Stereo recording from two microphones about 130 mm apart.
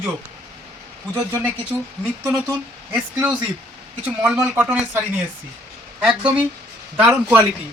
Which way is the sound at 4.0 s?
10° right (ahead or behind).